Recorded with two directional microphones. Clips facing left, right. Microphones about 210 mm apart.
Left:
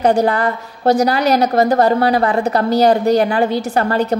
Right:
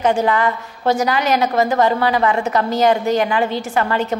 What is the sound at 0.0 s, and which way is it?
A woman's voice, 40° left (ahead or behind).